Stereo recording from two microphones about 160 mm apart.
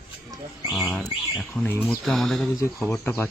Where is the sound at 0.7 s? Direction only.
Centre (ahead or behind).